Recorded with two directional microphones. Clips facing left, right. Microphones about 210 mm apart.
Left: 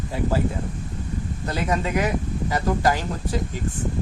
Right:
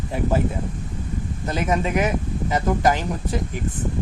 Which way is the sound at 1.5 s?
20° right (ahead or behind).